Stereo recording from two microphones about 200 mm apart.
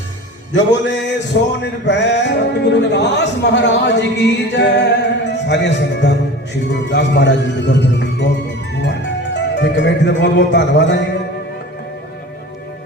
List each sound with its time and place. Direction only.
0.5 s music: 60° left (ahead or behind)
1.8 s speech: 60° left (ahead or behind)
8.8 s music: 60° left (ahead or behind)